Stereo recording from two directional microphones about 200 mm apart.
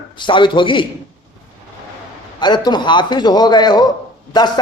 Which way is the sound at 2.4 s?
20° left (ahead or behind).